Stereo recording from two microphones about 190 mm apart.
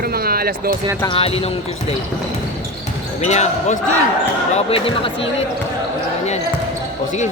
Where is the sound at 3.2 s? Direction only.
35° left (ahead or behind).